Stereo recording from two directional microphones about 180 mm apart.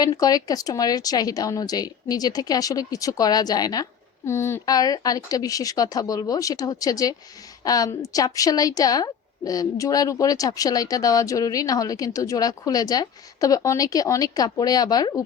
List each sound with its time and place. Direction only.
0.0 s a woman's voice: 20° left (ahead or behind)